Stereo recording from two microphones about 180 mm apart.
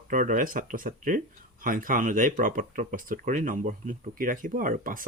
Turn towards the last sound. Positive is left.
turn(degrees=-50)  # may be behind; listen again after turning